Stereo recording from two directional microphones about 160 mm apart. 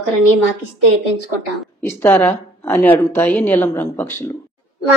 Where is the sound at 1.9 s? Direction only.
15° left (ahead or behind).